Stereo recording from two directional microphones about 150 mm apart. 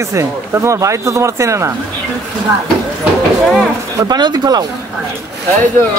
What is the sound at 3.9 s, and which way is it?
Speech, 25° right (ahead or behind).